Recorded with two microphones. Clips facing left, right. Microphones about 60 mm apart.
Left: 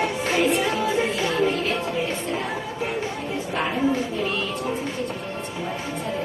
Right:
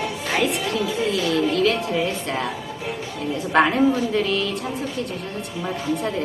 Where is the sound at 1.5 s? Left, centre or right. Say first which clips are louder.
Right 5 dB; right.